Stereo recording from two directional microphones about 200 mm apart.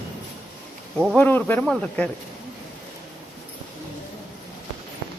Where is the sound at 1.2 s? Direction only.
10° left (ahead or behind).